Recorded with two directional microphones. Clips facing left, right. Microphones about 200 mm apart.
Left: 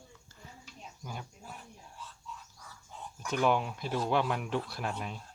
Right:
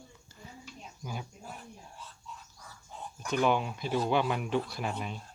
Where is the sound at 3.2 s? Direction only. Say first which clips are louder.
Right 1 dB; centre (ahead or behind).